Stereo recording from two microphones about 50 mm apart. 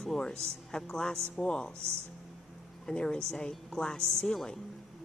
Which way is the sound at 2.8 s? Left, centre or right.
Centre.